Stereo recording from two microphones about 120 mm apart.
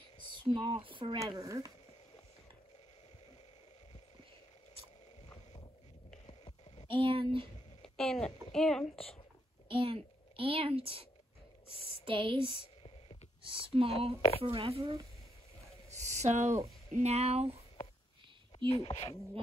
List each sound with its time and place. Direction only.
0.3 s speech: 40° right (ahead or behind)
1.4 s speech: 30° right (ahead or behind)
6.9 s speech: 45° right (ahead or behind)
7.8 s a woman's voice: 5° left (ahead or behind)
9.7 s a woman's voice: 50° right (ahead or behind)
15.9 s a sound: 75° right (ahead or behind)
16.9 s speech: 60° right (ahead or behind)
18.7 s speech: 55° left (ahead or behind)